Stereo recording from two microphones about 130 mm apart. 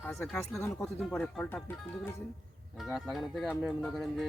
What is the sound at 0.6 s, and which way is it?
Speech, 20° left (ahead or behind).